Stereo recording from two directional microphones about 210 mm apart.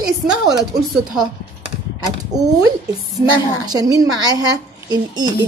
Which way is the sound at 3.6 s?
15° right (ahead or behind).